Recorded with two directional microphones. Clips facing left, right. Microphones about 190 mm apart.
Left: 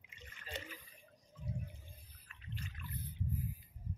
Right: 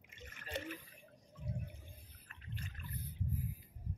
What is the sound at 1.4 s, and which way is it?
Water, 65° right (ahead or behind).